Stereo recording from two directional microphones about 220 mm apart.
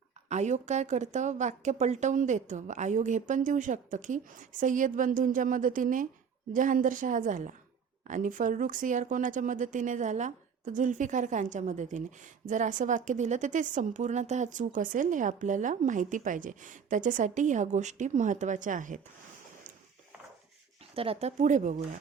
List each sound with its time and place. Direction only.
0.3 s speech: 30° right (ahead or behind)
20.9 s speech: 25° right (ahead or behind)